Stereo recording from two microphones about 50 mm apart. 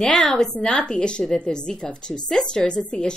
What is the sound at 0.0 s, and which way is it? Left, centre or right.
Speech, centre.